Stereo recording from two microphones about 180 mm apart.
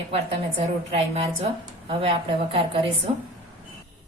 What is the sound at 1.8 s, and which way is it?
A woman's voice, 30° right (ahead or behind).